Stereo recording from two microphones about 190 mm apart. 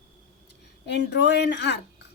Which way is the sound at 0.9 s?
65° left (ahead or behind).